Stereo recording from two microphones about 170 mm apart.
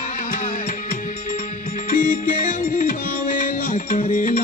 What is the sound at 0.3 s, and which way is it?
Music, 50° left (ahead or behind).